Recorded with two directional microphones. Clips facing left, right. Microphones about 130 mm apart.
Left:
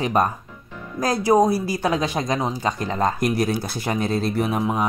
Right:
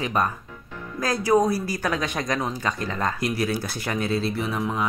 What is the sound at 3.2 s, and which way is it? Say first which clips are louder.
Speech: left 4 dB; 45° left (ahead or behind).